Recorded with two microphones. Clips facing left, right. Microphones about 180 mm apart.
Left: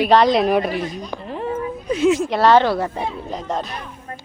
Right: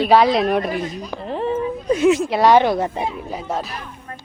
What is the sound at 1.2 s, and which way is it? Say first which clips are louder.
Speech: right 4 dB; 30° right (ahead or behind).